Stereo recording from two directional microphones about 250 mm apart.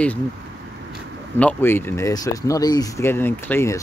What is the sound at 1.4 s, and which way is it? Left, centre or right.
Speech, centre.